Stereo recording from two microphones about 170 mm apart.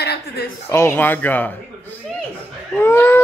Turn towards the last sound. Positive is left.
turn(degrees=15)  # may be behind; listen again after turning